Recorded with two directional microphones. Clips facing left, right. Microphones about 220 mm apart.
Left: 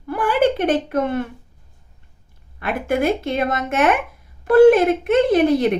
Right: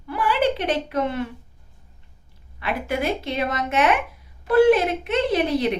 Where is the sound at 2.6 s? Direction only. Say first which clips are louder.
Left 5 dB; 50° left (ahead or behind).